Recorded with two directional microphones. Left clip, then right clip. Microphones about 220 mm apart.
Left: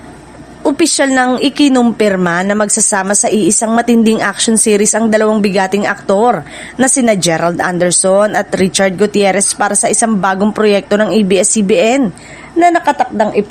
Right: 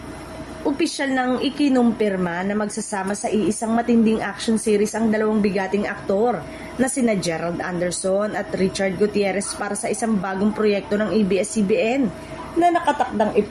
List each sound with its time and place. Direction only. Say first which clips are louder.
0.6 s a woman's voice: left 11 dB; 50° left (ahead or behind)